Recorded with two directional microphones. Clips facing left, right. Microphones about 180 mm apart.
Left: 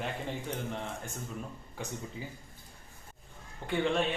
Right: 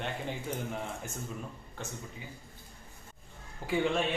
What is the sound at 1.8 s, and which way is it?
Speech, 10° left (ahead or behind).